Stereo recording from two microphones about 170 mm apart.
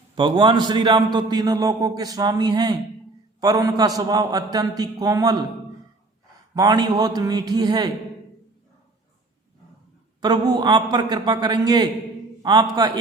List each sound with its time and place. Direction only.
0.2 s a man's voice: 30° right (ahead or behind)
6.5 s a man's voice: 20° right (ahead or behind)
10.2 s a man's voice: 25° right (ahead or behind)